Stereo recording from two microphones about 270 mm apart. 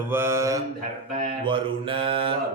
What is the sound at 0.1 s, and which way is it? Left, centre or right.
Mantra, centre.